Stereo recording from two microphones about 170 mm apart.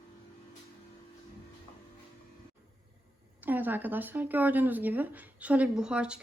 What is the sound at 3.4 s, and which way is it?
Speech, 10° right (ahead or behind).